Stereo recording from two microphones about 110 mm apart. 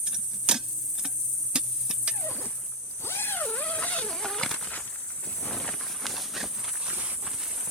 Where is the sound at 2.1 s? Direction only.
15° left (ahead or behind).